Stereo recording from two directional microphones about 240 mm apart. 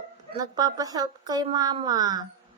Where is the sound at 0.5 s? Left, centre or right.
Centre.